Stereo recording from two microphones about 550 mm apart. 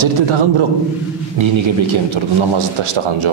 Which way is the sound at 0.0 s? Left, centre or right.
Right.